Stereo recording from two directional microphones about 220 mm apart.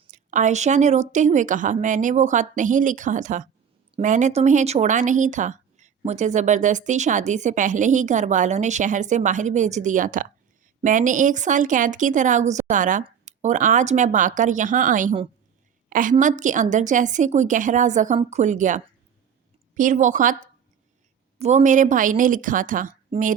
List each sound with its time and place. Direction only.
0.1 s a woman's voice: 35° right (ahead or behind)